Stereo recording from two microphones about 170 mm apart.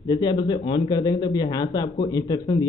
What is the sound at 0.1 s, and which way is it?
A man's voice, 25° left (ahead or behind).